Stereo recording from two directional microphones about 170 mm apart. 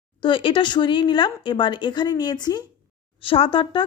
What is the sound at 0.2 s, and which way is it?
Speech, 30° left (ahead or behind).